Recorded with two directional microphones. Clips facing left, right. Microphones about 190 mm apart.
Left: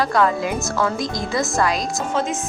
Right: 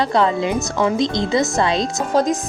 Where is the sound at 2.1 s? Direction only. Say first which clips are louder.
Right 7 dB; 35° right (ahead or behind).